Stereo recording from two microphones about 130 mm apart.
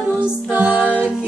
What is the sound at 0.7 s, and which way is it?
Music, 10° left (ahead or behind).